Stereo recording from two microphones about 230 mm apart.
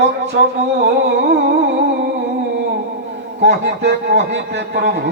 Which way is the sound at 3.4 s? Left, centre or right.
Right.